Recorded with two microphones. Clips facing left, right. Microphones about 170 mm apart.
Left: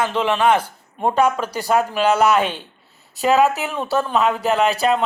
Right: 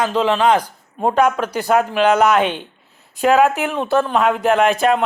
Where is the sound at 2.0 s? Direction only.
5° left (ahead or behind).